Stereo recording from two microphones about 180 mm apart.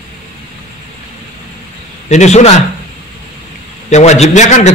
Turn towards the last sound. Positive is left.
turn(degrees=40)  # may be behind; listen again after turning